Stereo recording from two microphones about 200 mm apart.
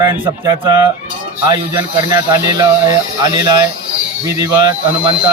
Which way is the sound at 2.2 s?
15° right (ahead or behind).